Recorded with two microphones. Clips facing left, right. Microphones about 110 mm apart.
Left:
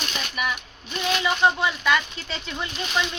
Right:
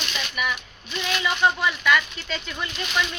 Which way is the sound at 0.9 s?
25° left (ahead or behind).